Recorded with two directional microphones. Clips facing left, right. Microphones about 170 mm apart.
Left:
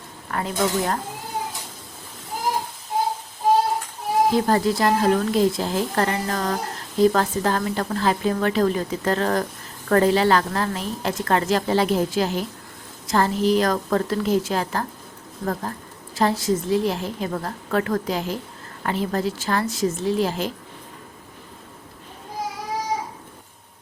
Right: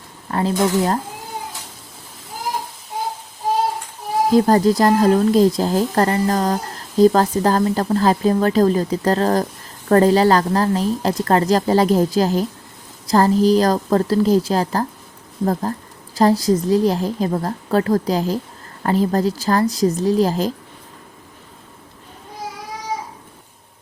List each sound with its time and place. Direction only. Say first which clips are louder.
0.3 s speech: right 5 dB; 30° right (ahead or behind)
4.3 s speech: right 10 dB; 40° right (ahead or behind)
16.1 s speech: right 6 dB; 35° right (ahead or behind)